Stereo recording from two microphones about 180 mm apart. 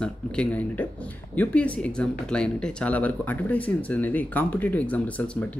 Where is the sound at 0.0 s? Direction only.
5° left (ahead or behind).